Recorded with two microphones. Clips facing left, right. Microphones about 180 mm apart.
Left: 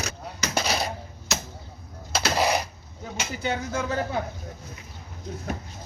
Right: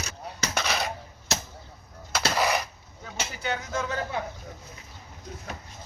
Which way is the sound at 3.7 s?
35° left (ahead or behind).